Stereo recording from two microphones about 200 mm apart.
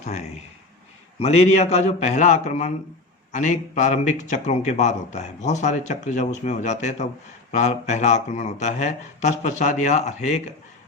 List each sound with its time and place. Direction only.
0.0 s speech: 35° left (ahead or behind)